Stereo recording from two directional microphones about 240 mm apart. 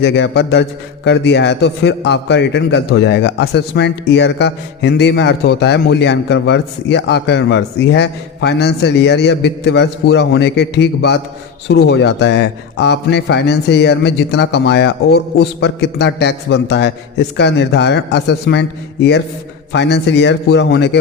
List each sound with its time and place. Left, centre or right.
0.0 s a man's voice: left